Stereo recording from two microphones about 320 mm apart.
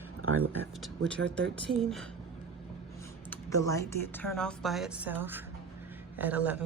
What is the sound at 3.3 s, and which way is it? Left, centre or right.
Speech, centre.